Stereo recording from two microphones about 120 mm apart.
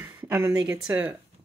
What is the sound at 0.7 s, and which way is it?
Speech, 10° right (ahead or behind).